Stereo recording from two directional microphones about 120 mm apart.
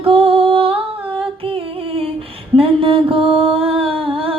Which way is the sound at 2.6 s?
50° right (ahead or behind).